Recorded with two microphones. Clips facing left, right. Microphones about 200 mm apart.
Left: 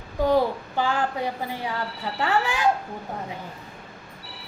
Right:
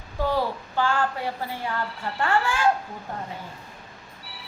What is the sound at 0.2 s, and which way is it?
A woman's voice, 15° left (ahead or behind).